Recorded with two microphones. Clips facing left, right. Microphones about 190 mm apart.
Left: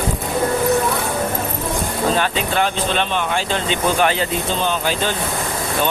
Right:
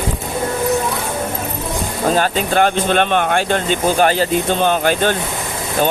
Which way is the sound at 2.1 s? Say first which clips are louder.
Right 3 dB; 40° right (ahead or behind).